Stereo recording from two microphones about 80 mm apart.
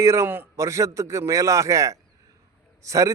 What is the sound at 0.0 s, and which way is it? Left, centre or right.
A man's voice, right.